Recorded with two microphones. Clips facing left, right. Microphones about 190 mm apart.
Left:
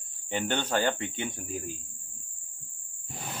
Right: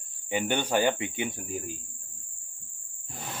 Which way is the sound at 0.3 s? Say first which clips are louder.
Right 2 dB; 10° right (ahead or behind).